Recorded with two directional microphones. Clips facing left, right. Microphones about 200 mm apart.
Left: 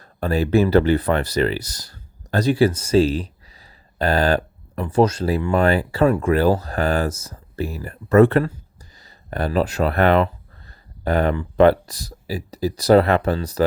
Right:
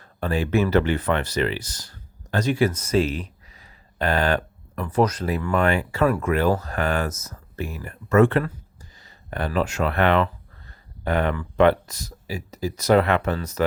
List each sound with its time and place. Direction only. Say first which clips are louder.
0.0 s speech: left 4 dB; 40° left (ahead or behind)